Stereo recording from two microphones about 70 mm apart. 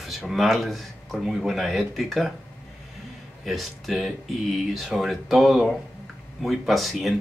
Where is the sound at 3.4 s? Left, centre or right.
Centre.